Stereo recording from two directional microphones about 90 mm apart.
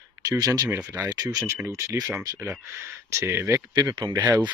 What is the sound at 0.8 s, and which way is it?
Speech, 25° right (ahead or behind).